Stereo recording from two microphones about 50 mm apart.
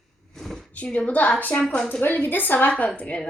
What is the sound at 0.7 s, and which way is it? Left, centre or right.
A woman's voice, left.